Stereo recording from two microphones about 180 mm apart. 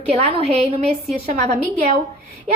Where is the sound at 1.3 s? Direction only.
50° right (ahead or behind).